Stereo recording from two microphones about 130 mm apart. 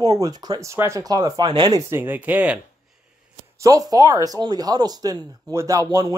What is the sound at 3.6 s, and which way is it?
Speech, 25° right (ahead or behind).